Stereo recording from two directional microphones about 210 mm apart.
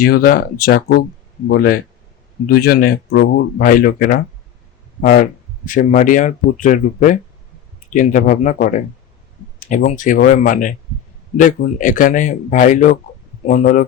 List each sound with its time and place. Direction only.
0.0 s speech: 45° left (ahead or behind)